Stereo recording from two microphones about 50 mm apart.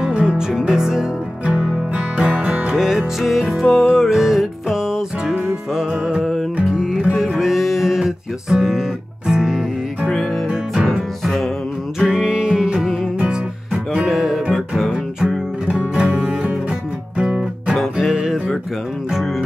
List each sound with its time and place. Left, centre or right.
0.0 s music: centre
1.4 s music: right
2.7 s music: centre
10.0 s music: centre
10.5 s music: centre
11.2 s music: centre
12.0 s music: centre
13.9 s music: centre
14.9 s music: centre
17.7 s music: centre